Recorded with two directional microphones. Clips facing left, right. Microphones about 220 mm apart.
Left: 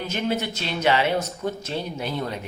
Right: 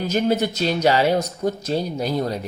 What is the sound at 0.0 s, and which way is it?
Speech, 40° right (ahead or behind).